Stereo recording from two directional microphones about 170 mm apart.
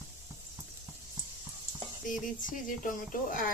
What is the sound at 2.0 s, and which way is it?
Speech, 50° left (ahead or behind).